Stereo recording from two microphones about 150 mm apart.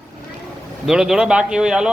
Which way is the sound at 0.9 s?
5° right (ahead or behind).